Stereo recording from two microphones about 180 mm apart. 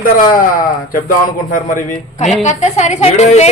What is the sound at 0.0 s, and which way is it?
Speech, 50° left (ahead or behind).